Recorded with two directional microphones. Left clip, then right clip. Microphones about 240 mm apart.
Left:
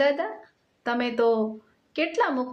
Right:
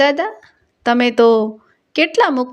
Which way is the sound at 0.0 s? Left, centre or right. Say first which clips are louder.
Right 8 dB; right.